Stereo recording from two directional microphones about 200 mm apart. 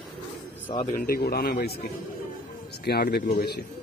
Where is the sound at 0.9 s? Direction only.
50° left (ahead or behind).